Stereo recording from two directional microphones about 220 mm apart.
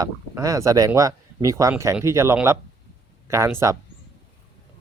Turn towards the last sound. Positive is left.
turn(degrees=-10)  # may be behind; listen again after turning